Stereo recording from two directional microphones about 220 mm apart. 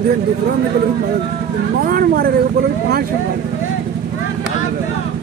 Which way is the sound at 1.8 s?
40° right (ahead or behind).